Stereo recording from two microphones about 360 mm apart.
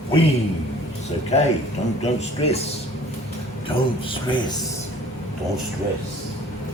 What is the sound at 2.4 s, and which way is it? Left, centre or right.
Speech, centre.